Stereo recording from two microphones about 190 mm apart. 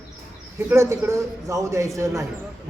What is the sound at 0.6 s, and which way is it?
A man's voice, 10° right (ahead or behind).